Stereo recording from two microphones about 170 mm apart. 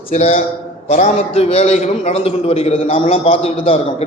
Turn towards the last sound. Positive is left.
turn(degrees=35)  # may be behind; listen again after turning